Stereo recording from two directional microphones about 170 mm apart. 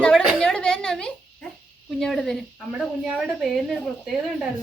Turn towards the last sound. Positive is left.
turn(degrees=0)  # may be behind; listen again after turning